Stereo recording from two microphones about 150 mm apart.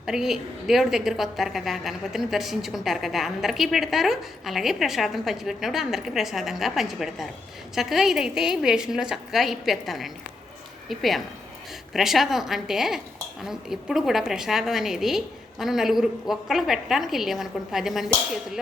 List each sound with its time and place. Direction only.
0.0 s a woman's voice: 5° right (ahead or behind)